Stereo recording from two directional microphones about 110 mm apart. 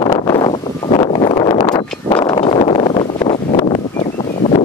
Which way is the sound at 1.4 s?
40° left (ahead or behind).